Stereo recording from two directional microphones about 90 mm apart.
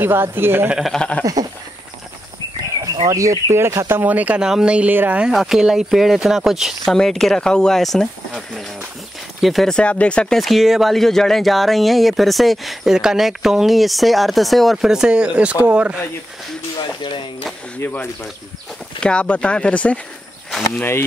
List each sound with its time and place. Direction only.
0.0 s speech: 25° right (ahead or behind)
0.7 s speech: 5° right (ahead or behind)
0.9 s speech: 10° left (ahead or behind)
3.1 s speech: 35° right (ahead or behind); by 5.2 s 20° right (ahead or behind)
5.2 s speech: 5° right (ahead or behind)
9.4 s speech: centre (ahead or behind)
10.4 s speech: centre (ahead or behind)
16.7 s speech: 65° left (ahead or behind)
17.7 s speech: 25° left (ahead or behind)
18.9 s speech: 10° left (ahead or behind)